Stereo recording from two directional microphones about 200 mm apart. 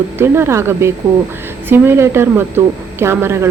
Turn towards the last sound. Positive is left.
turn(degrees=-10)  # may be behind; listen again after turning